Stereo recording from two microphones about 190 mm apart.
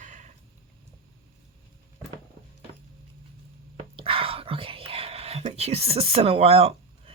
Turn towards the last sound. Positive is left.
turn(degrees=-30)  # may be behind; listen again after turning